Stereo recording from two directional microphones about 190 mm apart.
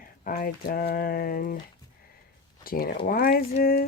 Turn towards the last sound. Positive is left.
turn(degrees=50)  # may be behind; listen again after turning